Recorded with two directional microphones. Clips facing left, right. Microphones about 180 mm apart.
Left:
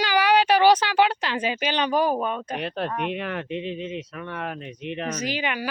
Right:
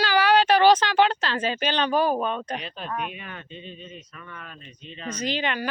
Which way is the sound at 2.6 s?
65° left (ahead or behind).